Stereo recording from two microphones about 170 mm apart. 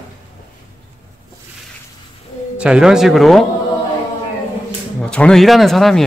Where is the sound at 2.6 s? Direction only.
5° right (ahead or behind).